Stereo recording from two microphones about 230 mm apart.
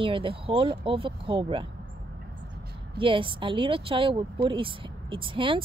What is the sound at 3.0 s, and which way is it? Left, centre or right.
Speech, right.